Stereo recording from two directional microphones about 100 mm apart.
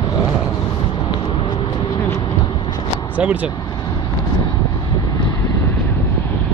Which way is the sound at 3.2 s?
15° right (ahead or behind).